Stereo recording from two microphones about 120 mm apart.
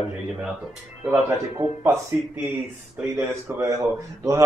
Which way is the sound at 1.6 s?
15° right (ahead or behind).